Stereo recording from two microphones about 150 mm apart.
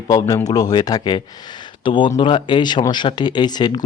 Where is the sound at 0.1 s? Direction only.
25° left (ahead or behind).